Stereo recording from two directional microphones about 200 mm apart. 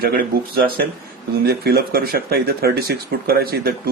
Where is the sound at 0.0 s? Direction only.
50° right (ahead or behind).